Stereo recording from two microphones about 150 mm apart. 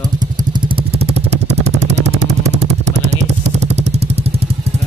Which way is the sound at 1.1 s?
50° right (ahead or behind).